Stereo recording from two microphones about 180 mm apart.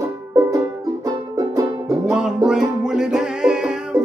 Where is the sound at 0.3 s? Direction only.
20° right (ahead or behind).